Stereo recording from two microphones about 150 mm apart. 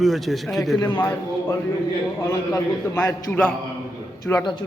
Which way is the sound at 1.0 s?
20° left (ahead or behind).